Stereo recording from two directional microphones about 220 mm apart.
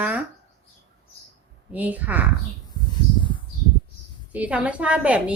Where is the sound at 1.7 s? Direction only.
5° right (ahead or behind).